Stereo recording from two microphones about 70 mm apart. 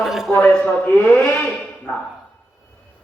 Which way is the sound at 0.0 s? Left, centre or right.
Centre.